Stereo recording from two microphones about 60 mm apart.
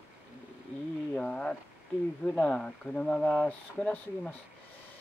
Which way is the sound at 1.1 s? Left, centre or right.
Centre.